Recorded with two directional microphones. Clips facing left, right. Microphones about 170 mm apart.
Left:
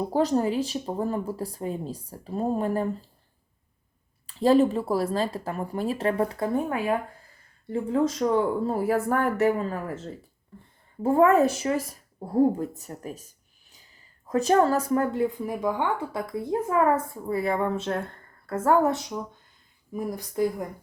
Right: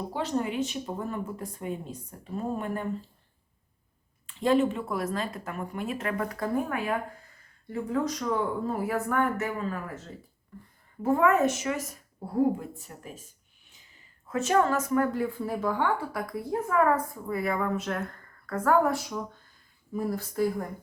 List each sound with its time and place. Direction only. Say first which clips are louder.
0.1 s speech: left 6 dB; 40° left (ahead or behind)
4.4 s speech: left 4 dB; 35° left (ahead or behind); by 20.7 s 15° left (ahead or behind)